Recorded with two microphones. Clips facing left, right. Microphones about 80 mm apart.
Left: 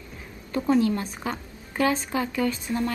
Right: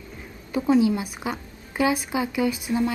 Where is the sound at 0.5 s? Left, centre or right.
Centre.